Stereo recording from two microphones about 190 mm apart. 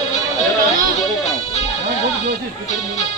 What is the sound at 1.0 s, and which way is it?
Music, 35° left (ahead or behind).